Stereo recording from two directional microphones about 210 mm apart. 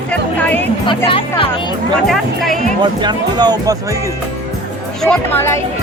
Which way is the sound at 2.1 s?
Centre (ahead or behind).